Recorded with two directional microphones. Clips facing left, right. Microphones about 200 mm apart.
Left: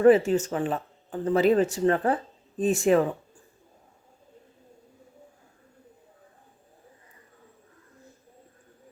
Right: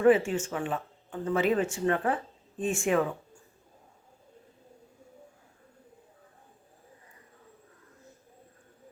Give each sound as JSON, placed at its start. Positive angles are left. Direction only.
{"t": 0.0, "sound": "speech", "side_deg": 40}